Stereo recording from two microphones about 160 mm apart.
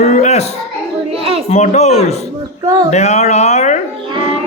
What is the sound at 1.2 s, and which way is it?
Child singing, 35° right (ahead or behind).